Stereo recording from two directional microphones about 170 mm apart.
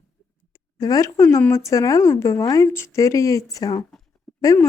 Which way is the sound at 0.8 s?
20° left (ahead or behind).